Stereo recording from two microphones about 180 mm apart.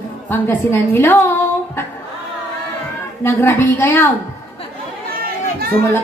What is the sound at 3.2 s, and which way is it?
Speech, 15° left (ahead or behind).